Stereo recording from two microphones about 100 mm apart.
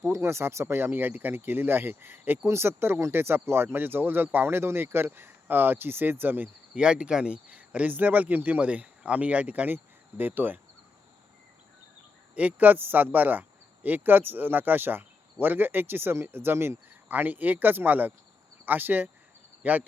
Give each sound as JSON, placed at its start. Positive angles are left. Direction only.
{"t": 0.0, "sound": "speech", "side_deg": -30}
{"t": 12.3, "sound": "speech", "side_deg": -15}